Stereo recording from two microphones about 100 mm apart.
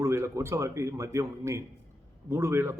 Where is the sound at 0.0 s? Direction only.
30° right (ahead or behind).